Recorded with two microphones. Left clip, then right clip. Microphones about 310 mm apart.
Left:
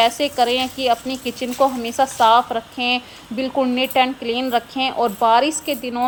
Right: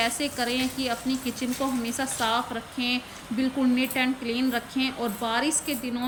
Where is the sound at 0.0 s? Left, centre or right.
Centre.